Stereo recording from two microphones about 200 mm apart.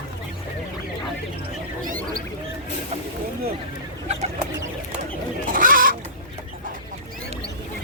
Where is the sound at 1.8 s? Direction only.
45° right (ahead or behind).